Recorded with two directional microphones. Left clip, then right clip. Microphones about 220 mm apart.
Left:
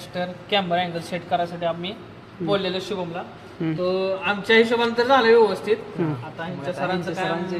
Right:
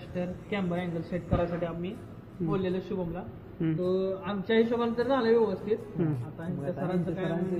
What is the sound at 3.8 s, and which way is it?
A man's voice, 40° left (ahead or behind).